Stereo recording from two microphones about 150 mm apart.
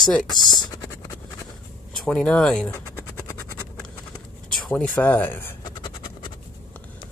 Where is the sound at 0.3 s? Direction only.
30° left (ahead or behind).